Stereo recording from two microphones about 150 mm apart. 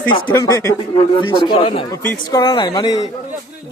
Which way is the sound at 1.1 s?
35° left (ahead or behind).